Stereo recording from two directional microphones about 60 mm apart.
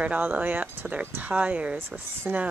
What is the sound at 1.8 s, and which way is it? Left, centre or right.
Speech, right.